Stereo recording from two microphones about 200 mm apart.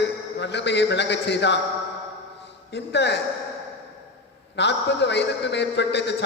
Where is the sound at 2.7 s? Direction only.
60° left (ahead or behind).